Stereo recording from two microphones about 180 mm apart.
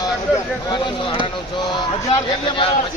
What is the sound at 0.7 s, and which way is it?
Speech, 25° left (ahead or behind).